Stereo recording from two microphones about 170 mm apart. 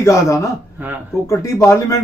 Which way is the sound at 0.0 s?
15° left (ahead or behind).